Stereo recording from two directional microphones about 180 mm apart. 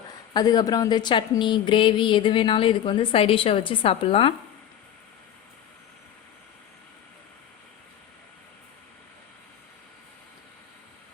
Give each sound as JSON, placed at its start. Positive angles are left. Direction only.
{"t": 0.3, "sound": "speech", "side_deg": 20}